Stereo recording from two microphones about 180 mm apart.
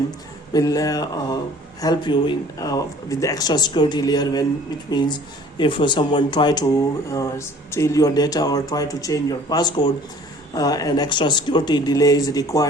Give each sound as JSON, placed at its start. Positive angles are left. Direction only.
{"t": 0.5, "sound": "speech", "side_deg": 20}